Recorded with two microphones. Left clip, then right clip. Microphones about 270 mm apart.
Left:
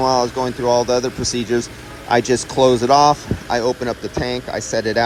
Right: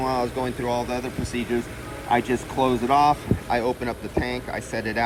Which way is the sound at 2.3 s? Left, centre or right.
Right.